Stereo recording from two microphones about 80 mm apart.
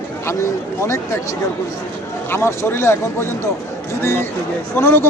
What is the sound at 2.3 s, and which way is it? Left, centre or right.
Speech, left.